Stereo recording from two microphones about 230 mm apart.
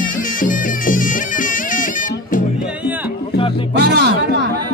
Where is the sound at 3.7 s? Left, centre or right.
Right.